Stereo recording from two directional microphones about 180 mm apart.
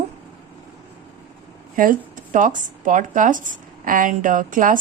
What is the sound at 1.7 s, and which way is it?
Speech, 50° right (ahead or behind).